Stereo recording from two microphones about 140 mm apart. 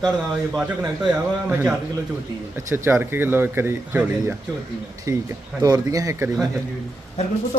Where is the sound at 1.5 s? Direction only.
10° right (ahead or behind).